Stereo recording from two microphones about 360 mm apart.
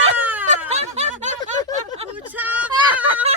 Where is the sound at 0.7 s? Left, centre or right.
Centre.